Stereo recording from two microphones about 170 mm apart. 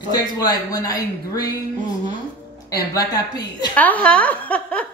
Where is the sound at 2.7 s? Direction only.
20° left (ahead or behind).